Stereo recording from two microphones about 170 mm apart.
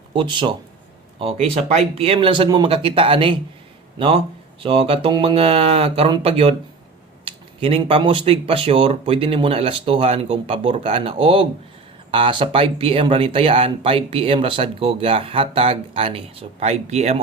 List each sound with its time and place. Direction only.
0.1 s a man's voice: 30° right (ahead or behind)